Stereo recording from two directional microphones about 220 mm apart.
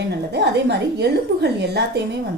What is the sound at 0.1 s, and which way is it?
A woman's voice, 50° right (ahead or behind).